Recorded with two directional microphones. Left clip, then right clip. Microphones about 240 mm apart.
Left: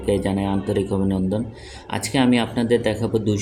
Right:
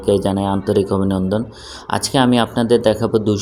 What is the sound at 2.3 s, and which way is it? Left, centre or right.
Speech, right.